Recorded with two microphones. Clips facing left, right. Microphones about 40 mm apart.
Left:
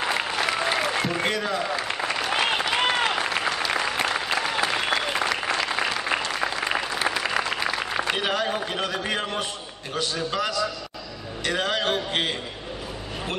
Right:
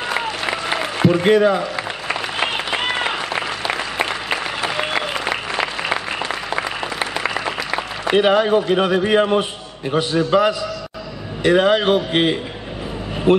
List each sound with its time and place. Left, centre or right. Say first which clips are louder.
1.0 s a sound: right 11 dB; centre
4.3 s applause: right 2 dB; right
5.6 s applause: right 4 dB; right
11.4 s a man's voice: right 10 dB; right